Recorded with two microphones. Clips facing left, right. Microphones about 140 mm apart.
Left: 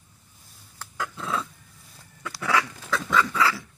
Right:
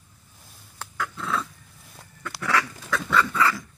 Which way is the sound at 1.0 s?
15° left (ahead or behind).